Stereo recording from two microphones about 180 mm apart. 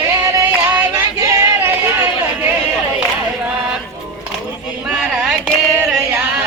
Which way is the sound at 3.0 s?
5° right (ahead or behind).